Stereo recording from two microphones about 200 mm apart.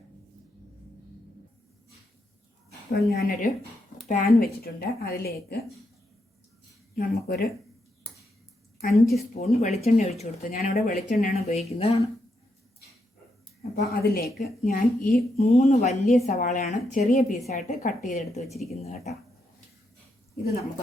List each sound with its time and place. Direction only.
2.9 s a woman's voice: 50° left (ahead or behind)
6.9 s a woman's voice: 50° left (ahead or behind)
8.9 s a woman's voice: centre (ahead or behind)
9.3 s speech: 35° left (ahead or behind)
13.7 s a woman's voice: 50° left (ahead or behind)
15.5 s speech: 35° left (ahead or behind)